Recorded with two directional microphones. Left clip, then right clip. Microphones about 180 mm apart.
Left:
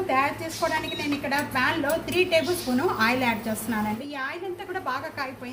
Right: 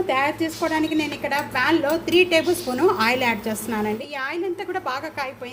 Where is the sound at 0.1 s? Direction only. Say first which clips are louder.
Right 1 dB; 55° right (ahead or behind).